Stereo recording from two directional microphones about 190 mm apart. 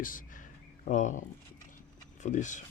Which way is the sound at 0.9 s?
40° left (ahead or behind).